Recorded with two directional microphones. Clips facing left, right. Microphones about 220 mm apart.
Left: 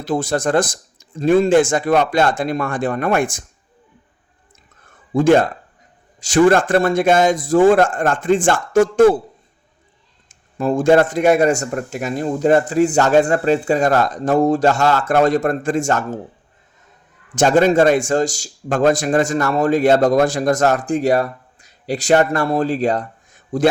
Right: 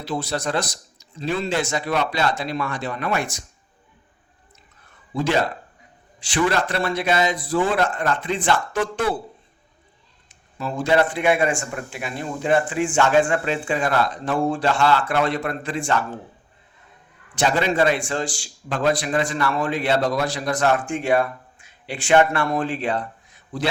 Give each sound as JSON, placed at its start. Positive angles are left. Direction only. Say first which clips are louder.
{"t": 0.0, "sound": "a man's voice", "louder": "left 7 dB", "side_deg": 50}
{"t": 5.1, "sound": "a man's voice", "louder": "left 9 dB", "side_deg": 50}
{"t": 10.2, "sound": "a man's voice", "louder": "left 10 dB", "side_deg": 50}
{"t": 17.3, "sound": "a man's voice", "louder": "left 8 dB", "side_deg": 45}